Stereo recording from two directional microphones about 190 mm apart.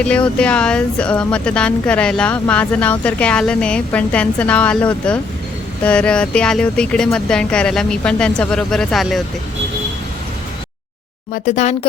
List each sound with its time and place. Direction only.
0.0 s speech: 5° left (ahead or behind)
11.4 s speech: 40° left (ahead or behind)